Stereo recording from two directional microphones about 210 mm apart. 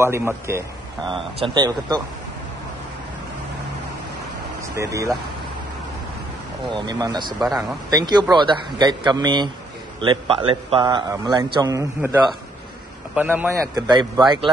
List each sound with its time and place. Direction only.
0.0 s a man's voice: 10° right (ahead or behind)
4.7 s a man's voice: 15° right (ahead or behind)
6.7 s a man's voice: 20° right (ahead or behind)
7.3 s a man's voice: centre (ahead or behind)
7.9 s a man's voice: 20° right (ahead or behind)
13.7 s a man's voice: 20° right (ahead or behind)